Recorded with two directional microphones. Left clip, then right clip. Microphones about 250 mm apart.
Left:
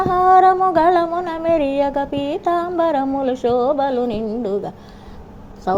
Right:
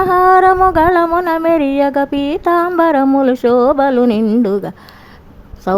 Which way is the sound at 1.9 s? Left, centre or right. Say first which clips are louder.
Right 5 dB; right.